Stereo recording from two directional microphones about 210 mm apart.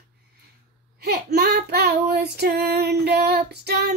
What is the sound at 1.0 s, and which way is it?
Child singing, 50° right (ahead or behind).